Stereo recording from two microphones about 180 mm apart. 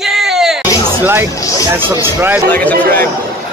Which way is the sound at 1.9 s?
15° right (ahead or behind).